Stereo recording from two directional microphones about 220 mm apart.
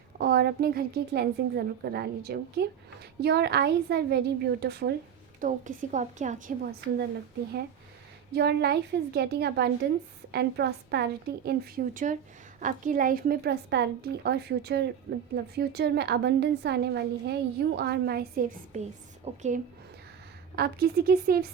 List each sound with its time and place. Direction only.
0.2 s a woman's voice: 45° right (ahead or behind)
5.4 s a woman's voice: 35° right (ahead or behind)
8.3 s a woman's voice: 50° right (ahead or behind); by 19.6 s 35° right (ahead or behind)
20.6 s a woman's voice: 45° right (ahead or behind)